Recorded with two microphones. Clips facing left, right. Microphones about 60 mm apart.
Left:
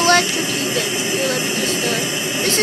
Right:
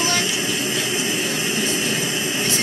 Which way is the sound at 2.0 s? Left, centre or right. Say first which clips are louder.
Left 1 dB; left.